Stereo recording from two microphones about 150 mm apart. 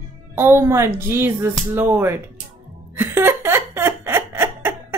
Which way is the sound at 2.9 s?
15° right (ahead or behind).